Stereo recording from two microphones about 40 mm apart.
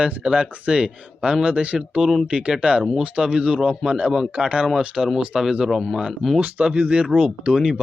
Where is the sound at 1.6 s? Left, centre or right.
Right.